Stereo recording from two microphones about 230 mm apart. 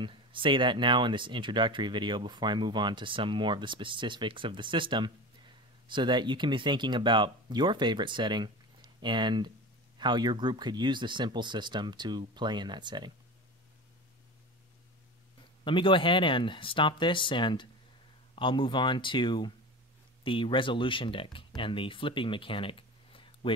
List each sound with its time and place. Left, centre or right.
0.0 s speech: right
15.6 s speech: left